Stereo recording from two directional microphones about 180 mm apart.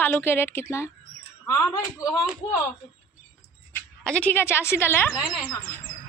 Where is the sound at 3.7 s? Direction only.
10° left (ahead or behind).